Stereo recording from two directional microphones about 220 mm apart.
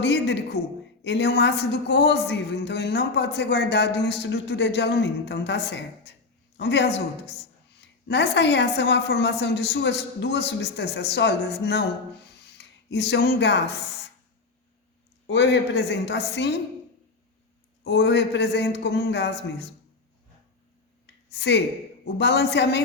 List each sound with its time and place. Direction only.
0.0 s a woman's voice: 50° left (ahead or behind)
15.3 s a woman's voice: 50° left (ahead or behind)
17.8 s a woman's voice: 50° left (ahead or behind)
21.2 s a woman's voice: 50° left (ahead or behind)